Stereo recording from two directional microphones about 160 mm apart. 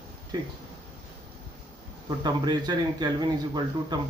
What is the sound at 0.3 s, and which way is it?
Speech, 25° right (ahead or behind).